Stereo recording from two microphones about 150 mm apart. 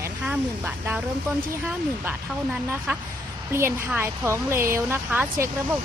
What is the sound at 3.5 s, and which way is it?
Speech, 15° right (ahead or behind).